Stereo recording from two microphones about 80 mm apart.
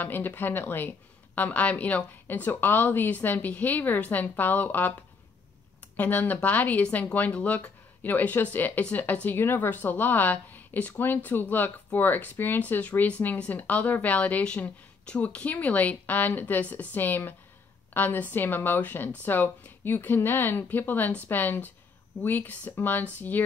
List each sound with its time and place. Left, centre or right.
0.0 s a woman's voice: left
5.9 s a woman's voice: left